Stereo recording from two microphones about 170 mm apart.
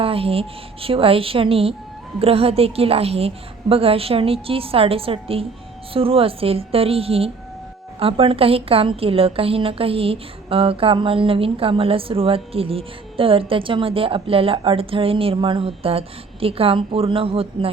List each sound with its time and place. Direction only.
0.0 s a woman's voice: 35° right (ahead or behind)